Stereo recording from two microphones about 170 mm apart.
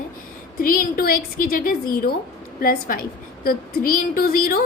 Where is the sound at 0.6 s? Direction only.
55° left (ahead or behind).